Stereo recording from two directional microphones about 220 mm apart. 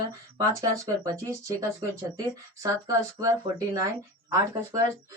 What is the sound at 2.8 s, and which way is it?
Speech, 15° right (ahead or behind).